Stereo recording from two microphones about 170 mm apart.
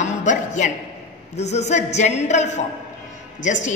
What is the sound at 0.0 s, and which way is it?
A woman's voice, 45° left (ahead or behind).